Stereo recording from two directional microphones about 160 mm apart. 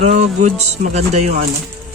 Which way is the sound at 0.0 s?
45° right (ahead or behind).